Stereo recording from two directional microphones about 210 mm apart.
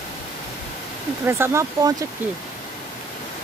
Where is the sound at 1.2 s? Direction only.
10° right (ahead or behind).